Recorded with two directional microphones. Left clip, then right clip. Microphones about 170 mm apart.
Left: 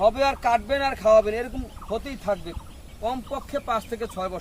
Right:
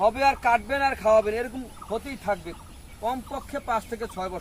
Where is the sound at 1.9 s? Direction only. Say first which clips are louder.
Left 1 dB; 20° left (ahead or behind).